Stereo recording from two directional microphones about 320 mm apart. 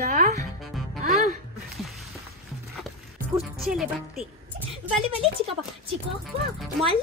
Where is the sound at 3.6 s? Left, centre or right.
Centre.